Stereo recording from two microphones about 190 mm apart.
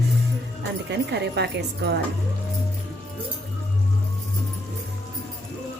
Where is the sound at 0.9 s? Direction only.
65° right (ahead or behind).